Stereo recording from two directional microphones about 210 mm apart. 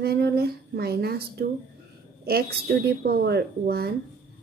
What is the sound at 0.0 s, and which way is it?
A woman's voice, 50° right (ahead or behind).